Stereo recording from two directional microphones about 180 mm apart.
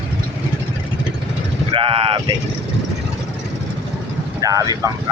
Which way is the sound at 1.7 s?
30° right (ahead or behind).